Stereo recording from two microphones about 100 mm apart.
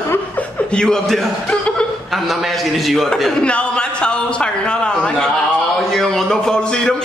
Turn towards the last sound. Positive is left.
turn(degrees=10)  # may be behind; listen again after turning